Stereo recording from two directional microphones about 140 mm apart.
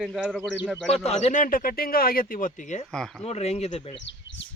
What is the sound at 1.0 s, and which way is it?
Speech, 50° left (ahead or behind).